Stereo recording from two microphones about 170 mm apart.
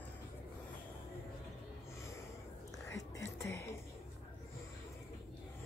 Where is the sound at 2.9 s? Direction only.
15° left (ahead or behind).